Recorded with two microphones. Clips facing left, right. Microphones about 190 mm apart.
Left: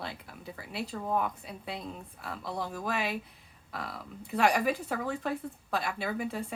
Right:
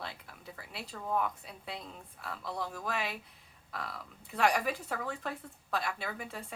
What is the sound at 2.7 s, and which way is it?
Speech, 5° left (ahead or behind).